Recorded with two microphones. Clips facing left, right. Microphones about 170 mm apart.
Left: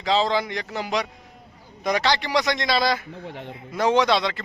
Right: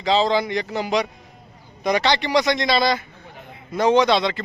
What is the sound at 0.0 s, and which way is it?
Speech, centre (ahead or behind).